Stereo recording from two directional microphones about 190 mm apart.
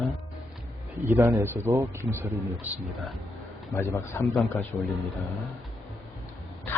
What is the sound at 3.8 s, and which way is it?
Speech, 15° left (ahead or behind).